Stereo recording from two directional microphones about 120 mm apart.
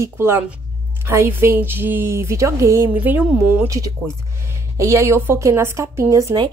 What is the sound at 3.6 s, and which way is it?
A woman's voice, 25° right (ahead or behind).